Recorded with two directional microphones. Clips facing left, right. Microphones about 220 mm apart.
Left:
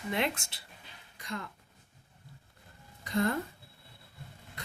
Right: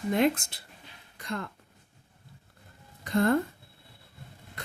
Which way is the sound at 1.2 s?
55° right (ahead or behind).